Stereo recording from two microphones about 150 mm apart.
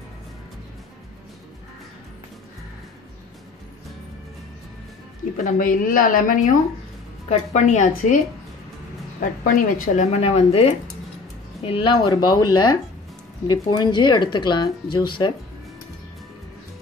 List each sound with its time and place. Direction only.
5.4 s speech: 65° left (ahead or behind)
7.2 s a woman's voice: 50° left (ahead or behind)
9.2 s speech: 70° left (ahead or behind)
10.1 s a woman's voice: 45° left (ahead or behind); by 12.4 s 30° left (ahead or behind)
13.5 s speech: 30° left (ahead or behind)